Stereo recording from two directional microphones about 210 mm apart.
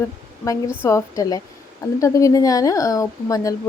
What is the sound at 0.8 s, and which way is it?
A woman's voice, 15° left (ahead or behind).